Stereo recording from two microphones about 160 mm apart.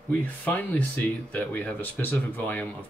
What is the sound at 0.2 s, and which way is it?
Speech, 10° left (ahead or behind).